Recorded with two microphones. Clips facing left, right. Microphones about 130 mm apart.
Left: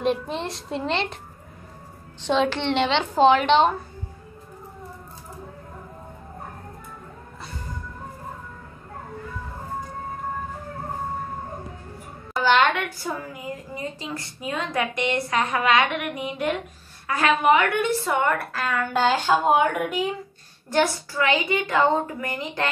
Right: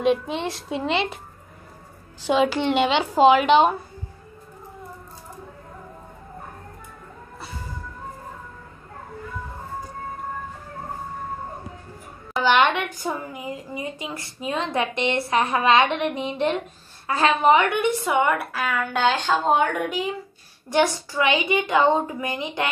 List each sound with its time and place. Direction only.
0.0 s a woman's voice: centre (ahead or behind)
2.2 s a woman's voice: 10° right (ahead or behind)
12.4 s a woman's voice: 15° right (ahead or behind); by 20.1 s centre (ahead or behind)
20.7 s a woman's voice: 15° right (ahead or behind)